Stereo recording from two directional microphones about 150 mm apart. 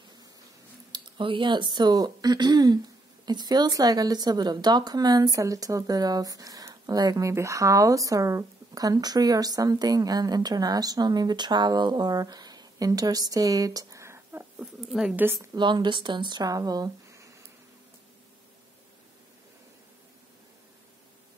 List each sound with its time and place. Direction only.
0.9 s speech: 35° right (ahead or behind); by 14.5 s 15° right (ahead or behind)
14.6 s speech: 5° right (ahead or behind)
15.5 s speech: 30° right (ahead or behind)